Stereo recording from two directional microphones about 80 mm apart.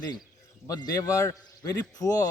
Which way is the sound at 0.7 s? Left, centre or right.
Left.